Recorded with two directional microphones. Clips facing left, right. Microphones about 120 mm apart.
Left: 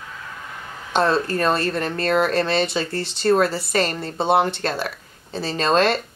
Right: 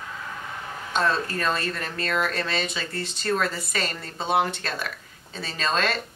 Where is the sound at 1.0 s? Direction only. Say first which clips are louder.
Left 6 dB; 30° left (ahead or behind).